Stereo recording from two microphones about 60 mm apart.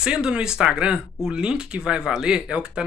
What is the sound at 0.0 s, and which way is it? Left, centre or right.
Speech, centre.